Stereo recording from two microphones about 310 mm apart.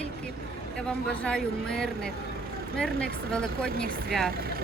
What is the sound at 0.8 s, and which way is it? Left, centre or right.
Speech, centre.